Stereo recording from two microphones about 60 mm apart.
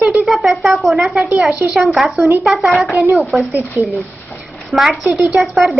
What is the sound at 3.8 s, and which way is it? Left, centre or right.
Speech, right.